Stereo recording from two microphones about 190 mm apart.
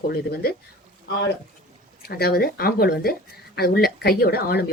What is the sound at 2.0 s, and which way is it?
Speech, 55° left (ahead or behind).